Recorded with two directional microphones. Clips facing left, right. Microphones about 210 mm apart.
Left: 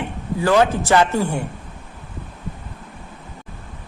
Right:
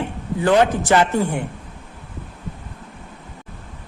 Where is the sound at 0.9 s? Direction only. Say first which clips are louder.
Even; 15° right (ahead or behind).